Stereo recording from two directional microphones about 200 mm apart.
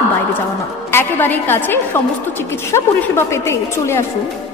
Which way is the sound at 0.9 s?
10° left (ahead or behind).